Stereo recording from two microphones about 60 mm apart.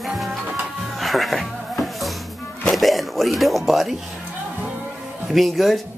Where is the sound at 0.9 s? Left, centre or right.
Centre.